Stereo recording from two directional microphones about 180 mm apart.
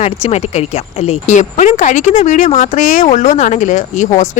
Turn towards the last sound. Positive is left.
turn(degrees=45)  # may be behind; listen again after turning